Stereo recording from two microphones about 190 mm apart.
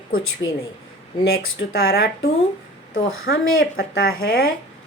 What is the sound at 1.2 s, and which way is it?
Speech, 65° left (ahead or behind).